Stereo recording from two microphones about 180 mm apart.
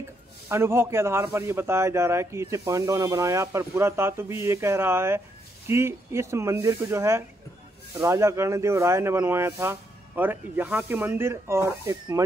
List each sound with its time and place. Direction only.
0.5 s a man's voice: 15° right (ahead or behind)